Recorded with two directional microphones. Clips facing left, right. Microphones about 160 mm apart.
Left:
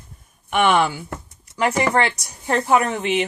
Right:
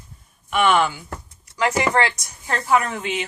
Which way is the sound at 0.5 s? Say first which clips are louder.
Left 1 dB; 45° left (ahead or behind).